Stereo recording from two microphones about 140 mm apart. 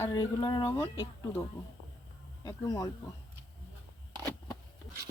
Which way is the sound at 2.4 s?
25° left (ahead or behind).